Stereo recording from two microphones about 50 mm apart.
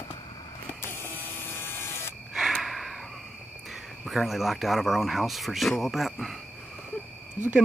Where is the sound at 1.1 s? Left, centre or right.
Left.